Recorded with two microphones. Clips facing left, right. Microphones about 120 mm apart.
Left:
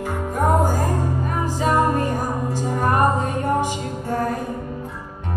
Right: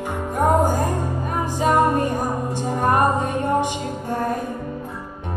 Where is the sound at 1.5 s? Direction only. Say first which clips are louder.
Right 2 dB; 20° right (ahead or behind).